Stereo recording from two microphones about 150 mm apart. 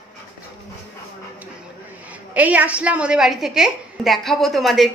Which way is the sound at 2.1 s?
10° right (ahead or behind).